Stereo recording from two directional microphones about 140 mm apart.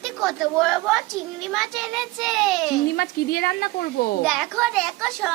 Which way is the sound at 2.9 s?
90° left.